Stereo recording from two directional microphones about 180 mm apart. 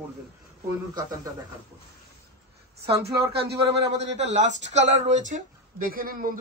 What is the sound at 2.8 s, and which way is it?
Speech, 65° right (ahead or behind).